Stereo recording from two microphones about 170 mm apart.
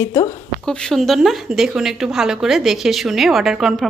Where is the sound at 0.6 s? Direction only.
5° left (ahead or behind).